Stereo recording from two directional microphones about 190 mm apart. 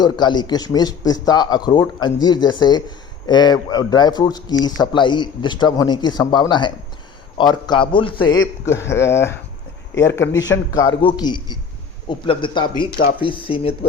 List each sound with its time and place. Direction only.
0.0 s a man's voice: 20° left (ahead or behind)
8.8 s speech: 15° left (ahead or behind)
9.9 s speech: 75° left (ahead or behind)
10.2 s a man's voice: 20° left (ahead or behind)
12.7 s speech: 50° left (ahead or behind)
13.1 s a man's voice: 25° left (ahead or behind)